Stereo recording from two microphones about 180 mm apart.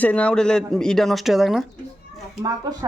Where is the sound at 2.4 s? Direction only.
20° right (ahead or behind).